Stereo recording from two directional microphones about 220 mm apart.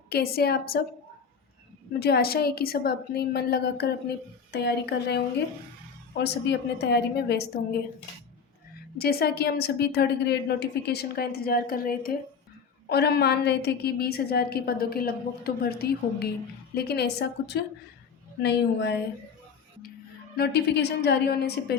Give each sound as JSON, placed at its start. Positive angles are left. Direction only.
{"t": 0.1, "sound": "a woman's voice", "side_deg": 45}
{"t": 1.9, "sound": "a woman's voice", "side_deg": 45}
{"t": 9.0, "sound": "a woman's voice", "side_deg": 45}
{"t": 20.3, "sound": "a woman's voice", "side_deg": 45}